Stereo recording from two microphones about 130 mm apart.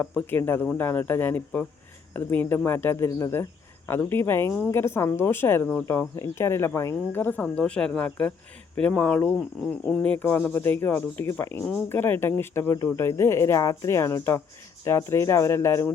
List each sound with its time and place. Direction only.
0.0 s speech: 10° left (ahead or behind)